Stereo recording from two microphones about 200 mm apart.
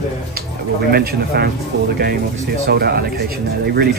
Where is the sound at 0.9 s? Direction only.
50° right (ahead or behind).